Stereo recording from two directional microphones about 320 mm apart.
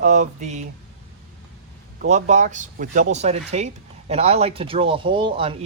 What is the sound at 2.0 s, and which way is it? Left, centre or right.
Speech, right.